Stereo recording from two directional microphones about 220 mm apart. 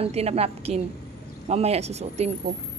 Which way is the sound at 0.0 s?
30° right (ahead or behind).